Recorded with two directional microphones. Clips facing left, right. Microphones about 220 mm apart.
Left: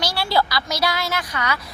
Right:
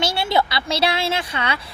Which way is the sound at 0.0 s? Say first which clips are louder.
Right 1 dB; 25° right (ahead or behind).